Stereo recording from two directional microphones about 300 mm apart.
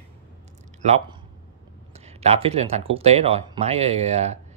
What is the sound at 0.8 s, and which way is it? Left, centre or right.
Speech, right.